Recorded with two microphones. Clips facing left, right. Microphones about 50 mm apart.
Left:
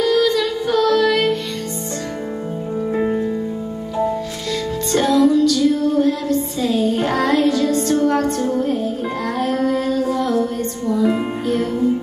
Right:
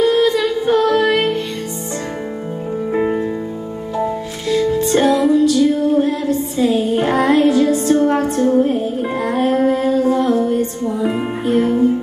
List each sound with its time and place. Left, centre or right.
0.0 s music: right
2.9 s music: right
9.3 s music: right